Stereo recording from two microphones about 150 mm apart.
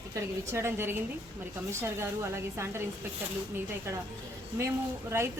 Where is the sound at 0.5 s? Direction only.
15° right (ahead or behind).